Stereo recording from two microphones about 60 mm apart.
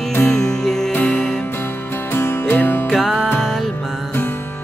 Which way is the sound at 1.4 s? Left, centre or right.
Left.